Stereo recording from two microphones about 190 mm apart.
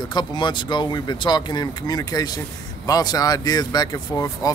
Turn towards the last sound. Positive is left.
turn(degrees=20)  # may be behind; listen again after turning